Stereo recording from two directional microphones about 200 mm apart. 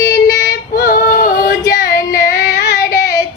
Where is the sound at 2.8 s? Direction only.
15° left (ahead or behind).